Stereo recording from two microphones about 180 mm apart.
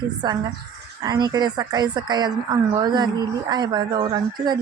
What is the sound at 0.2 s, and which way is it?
A woman's voice, 20° right (ahead or behind).